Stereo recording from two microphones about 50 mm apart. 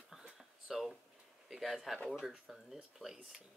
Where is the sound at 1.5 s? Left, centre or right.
Centre.